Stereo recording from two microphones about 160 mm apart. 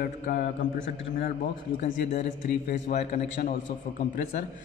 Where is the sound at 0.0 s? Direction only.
55° left (ahead or behind).